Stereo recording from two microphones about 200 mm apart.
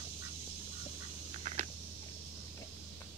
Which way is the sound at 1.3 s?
35° right (ahead or behind).